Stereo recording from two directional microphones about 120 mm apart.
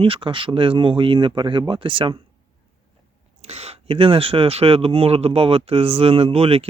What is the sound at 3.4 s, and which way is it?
Speech, 60° right (ahead or behind).